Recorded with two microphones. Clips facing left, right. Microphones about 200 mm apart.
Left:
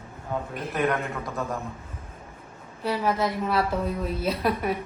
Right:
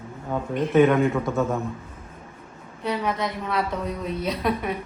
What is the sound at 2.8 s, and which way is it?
A woman's voice, 5° left (ahead or behind).